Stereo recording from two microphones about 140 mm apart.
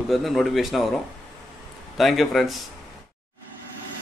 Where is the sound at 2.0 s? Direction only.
Centre (ahead or behind).